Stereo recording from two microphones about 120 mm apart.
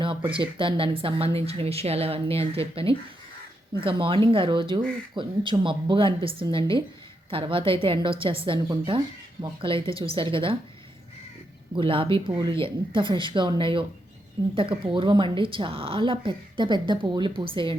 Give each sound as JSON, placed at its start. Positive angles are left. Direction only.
{"t": 0.3, "sound": "speech", "side_deg": -45}
{"t": 11.7, "sound": "speech", "side_deg": -45}